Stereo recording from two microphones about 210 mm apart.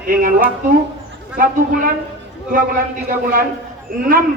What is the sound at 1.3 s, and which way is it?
Speech, 40° right (ahead or behind).